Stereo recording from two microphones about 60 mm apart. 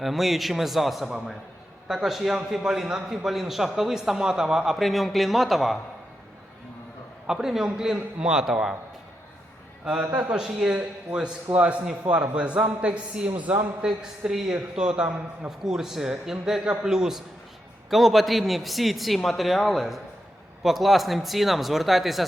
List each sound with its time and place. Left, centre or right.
0.0 s a man's voice: centre
7.3 s a man's voice: centre
10.3 s a man's voice: centre
13.8 s a man's voice: centre